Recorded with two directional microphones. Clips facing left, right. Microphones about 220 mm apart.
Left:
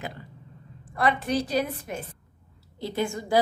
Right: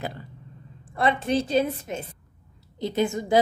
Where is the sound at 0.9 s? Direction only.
25° right (ahead or behind).